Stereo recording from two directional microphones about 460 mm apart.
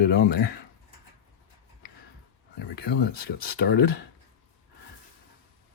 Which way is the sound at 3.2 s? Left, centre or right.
Centre.